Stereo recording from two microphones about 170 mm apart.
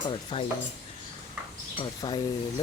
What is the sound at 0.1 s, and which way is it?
Stir, 30° left (ahead or behind).